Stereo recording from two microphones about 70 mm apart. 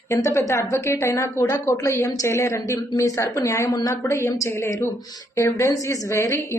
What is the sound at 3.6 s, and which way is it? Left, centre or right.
Speech, left.